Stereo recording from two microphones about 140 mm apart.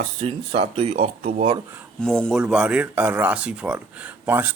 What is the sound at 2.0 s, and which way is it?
Speech, 5° left (ahead or behind).